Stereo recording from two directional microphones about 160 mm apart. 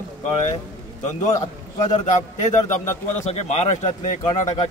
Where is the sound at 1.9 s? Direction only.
50° left (ahead or behind).